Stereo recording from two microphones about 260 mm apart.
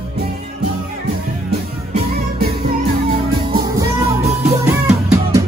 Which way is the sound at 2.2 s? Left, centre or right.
Right.